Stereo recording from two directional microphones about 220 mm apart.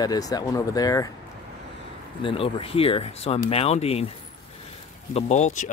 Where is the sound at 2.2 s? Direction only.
25° left (ahead or behind).